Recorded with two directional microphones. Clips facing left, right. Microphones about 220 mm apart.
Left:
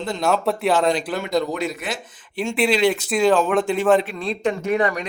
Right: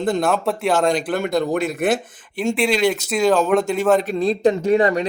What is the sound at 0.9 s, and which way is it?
Speech, 50° right (ahead or behind).